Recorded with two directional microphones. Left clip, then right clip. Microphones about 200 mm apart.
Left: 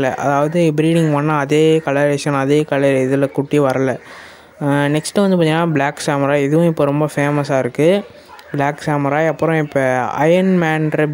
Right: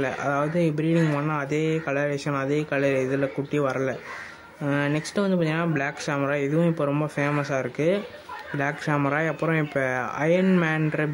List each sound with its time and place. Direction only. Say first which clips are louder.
0.0 s speech: left 9 dB; 40° left (ahead or behind)